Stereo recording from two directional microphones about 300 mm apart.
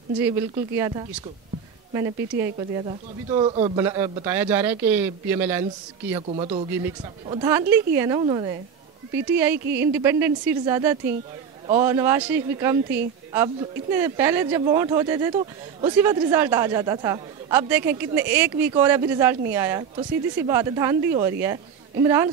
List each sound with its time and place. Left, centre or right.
0.2 s speech: centre
2.4 s speech: centre
6.2 s speech: centre